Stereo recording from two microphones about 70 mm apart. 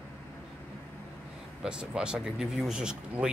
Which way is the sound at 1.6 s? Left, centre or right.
Centre.